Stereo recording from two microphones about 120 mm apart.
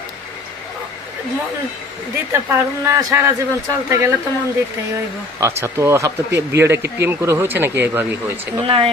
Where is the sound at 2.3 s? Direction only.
20° right (ahead or behind).